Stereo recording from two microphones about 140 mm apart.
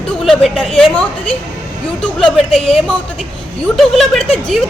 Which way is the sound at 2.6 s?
45° left (ahead or behind).